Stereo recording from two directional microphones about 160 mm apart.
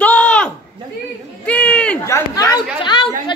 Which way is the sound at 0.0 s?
10° left (ahead or behind).